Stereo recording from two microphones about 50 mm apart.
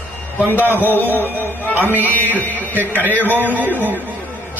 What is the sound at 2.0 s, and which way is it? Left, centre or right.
Speech, left.